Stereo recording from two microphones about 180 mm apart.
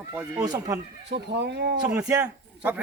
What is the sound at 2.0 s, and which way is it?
Speech, 15° right (ahead or behind).